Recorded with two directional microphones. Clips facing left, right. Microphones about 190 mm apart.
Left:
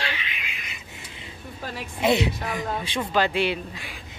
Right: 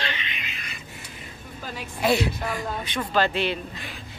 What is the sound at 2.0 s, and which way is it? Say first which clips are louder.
Speech: left 1 dB; 20° left (ahead or behind).